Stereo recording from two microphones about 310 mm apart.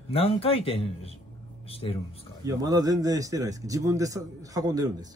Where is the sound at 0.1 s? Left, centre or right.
Centre.